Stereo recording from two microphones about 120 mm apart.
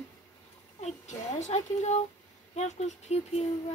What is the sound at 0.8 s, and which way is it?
Speech, 70° left (ahead or behind).